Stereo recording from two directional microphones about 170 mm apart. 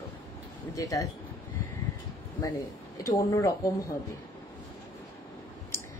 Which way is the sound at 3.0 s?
20° left (ahead or behind).